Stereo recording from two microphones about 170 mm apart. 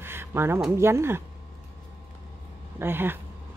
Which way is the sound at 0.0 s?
15° right (ahead or behind).